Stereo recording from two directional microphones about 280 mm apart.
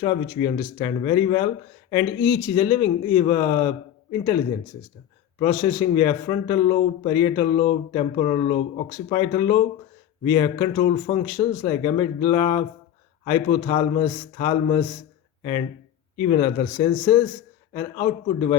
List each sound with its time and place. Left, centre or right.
0.0 s a man's voice: centre
5.4 s a man's voice: centre
16.2 s a man's voice: left